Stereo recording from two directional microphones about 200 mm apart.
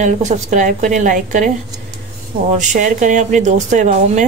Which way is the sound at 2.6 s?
40° right (ahead or behind).